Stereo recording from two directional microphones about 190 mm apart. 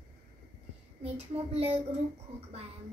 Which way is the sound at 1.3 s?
35° right (ahead or behind).